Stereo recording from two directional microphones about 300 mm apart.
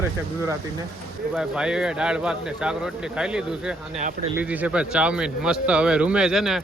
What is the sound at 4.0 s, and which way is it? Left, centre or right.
Speech, right.